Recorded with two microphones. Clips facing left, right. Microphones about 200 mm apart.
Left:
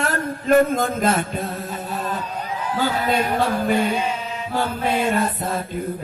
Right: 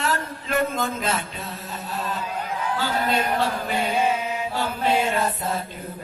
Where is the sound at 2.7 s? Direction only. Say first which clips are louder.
Left 4 dB; 50° left (ahead or behind).